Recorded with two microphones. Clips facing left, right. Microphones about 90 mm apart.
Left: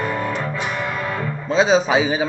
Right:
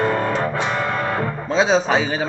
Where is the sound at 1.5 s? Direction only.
Centre (ahead or behind).